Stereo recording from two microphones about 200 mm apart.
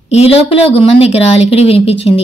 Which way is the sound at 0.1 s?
30° left (ahead or behind).